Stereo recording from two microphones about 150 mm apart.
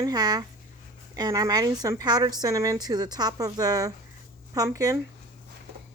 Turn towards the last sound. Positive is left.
turn(degrees=-20)  # may be behind; listen again after turning